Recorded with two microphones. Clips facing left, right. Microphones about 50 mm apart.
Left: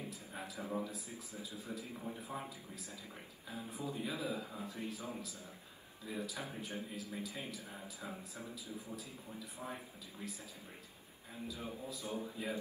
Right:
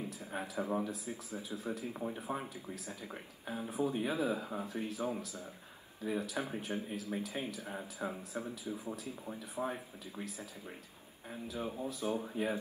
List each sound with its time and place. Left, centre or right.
0.3 s a man's voice: right
11.4 s speech: right